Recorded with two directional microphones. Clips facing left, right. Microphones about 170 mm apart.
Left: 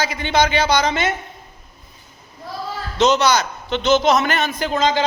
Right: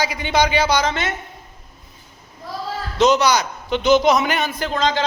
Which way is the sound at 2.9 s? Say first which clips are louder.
Even; 10° right (ahead or behind).